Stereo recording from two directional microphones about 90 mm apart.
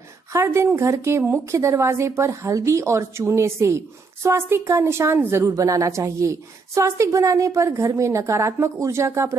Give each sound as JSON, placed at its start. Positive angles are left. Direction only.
{"t": 0.3, "sound": "a woman's voice", "side_deg": -30}
{"t": 5.6, "sound": "a woman's voice", "side_deg": -40}